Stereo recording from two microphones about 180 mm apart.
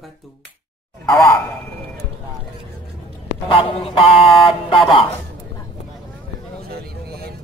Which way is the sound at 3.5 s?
30° left (ahead or behind).